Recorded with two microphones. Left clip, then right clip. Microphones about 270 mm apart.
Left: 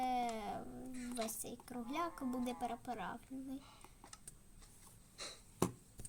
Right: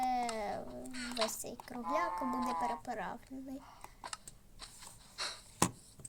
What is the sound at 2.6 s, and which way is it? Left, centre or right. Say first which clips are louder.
Speech: right 5 dB; centre.